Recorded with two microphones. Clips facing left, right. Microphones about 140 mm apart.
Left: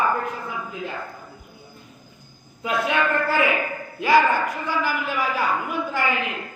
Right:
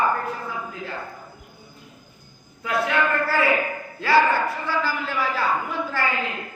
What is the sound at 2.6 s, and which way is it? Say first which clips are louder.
A woman's voice: even; 20° left (ahead or behind).